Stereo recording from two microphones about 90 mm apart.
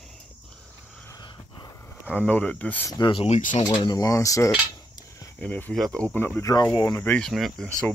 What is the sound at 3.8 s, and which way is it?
Speech, 45° left (ahead or behind).